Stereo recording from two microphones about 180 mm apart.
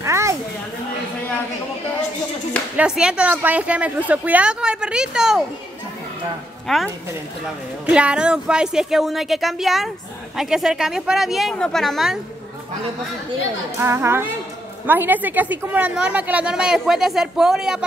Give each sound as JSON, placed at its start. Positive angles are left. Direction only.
{"t": 0.0, "sound": "a sound", "side_deg": -15}
{"t": 2.8, "sound": "a woman's voice", "side_deg": -5}
{"t": 6.7, "sound": "a woman's voice", "side_deg": 0}
{"t": 7.9, "sound": "a woman's voice", "side_deg": -5}
{"t": 13.7, "sound": "a woman's voice", "side_deg": -15}